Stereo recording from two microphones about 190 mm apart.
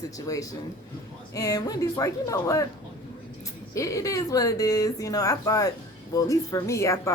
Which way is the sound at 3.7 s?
15° left (ahead or behind).